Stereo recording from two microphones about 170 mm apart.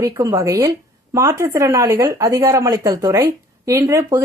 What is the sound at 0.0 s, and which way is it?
Speech, 20° right (ahead or behind).